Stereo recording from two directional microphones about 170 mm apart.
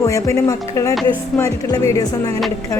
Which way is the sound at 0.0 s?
20° left (ahead or behind).